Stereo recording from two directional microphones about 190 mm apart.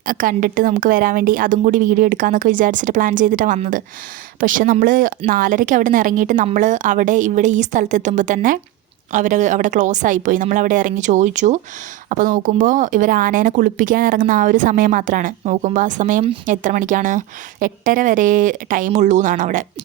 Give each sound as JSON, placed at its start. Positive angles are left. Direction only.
{"t": 0.0, "sound": "a woman's voice", "side_deg": -45}